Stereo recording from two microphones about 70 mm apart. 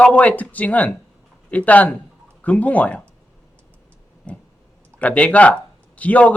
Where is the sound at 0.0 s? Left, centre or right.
Left.